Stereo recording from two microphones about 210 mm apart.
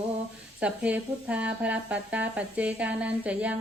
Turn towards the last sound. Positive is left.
turn(degrees=-5)  # may be behind; listen again after turning